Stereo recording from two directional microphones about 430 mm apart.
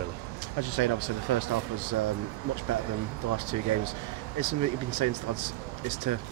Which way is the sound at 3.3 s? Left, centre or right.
Right.